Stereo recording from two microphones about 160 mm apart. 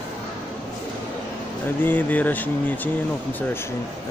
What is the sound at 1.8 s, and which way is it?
Speech, 10° left (ahead or behind).